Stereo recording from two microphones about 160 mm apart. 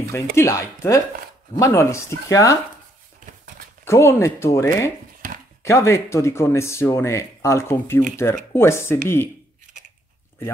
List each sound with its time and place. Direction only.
0.1 s speech: 15° left (ahead or behind)
3.8 s speech: 15° left (ahead or behind)